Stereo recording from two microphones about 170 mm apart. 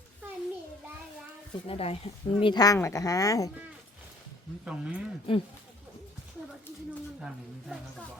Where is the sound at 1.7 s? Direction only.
35° left (ahead or behind); by 3.4 s 20° left (ahead or behind).